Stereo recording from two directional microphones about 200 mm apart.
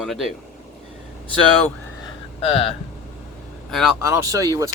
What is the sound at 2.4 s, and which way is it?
Speech, 30° left (ahead or behind).